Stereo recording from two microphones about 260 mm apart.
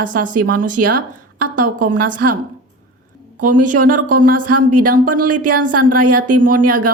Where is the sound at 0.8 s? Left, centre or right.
Right.